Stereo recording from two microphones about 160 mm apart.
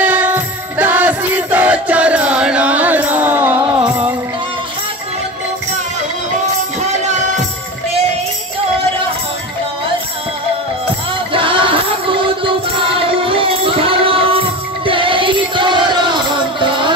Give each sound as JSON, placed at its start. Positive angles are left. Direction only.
{"t": 0.0, "sound": "music", "side_deg": -10}
{"t": 11.3, "sound": "music", "side_deg": -30}
{"t": 14.9, "sound": "chant", "side_deg": -35}